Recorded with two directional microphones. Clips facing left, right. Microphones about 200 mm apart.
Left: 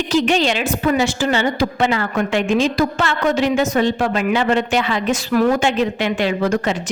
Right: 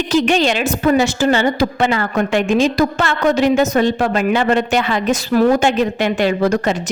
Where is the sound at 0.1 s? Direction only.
50° right (ahead or behind).